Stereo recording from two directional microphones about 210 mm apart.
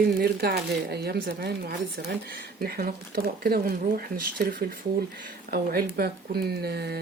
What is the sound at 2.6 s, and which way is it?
Speech, 45° right (ahead or behind).